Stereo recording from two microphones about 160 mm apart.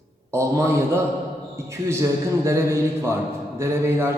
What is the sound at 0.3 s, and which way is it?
Speech, 20° right (ahead or behind).